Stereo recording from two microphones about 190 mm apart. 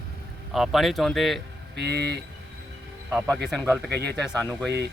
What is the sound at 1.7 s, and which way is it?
Speech, 60° right (ahead or behind).